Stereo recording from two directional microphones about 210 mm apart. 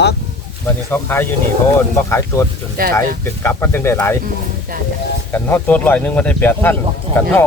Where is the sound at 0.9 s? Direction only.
10° left (ahead or behind).